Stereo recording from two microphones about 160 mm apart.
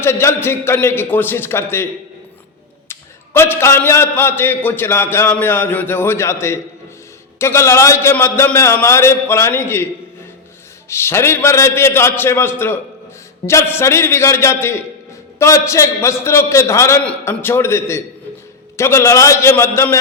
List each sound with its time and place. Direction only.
0.0 s a man's voice: 15° left (ahead or behind)
2.9 s a man's voice: 15° left (ahead or behind)
10.8 s a man's voice: 15° left (ahead or behind)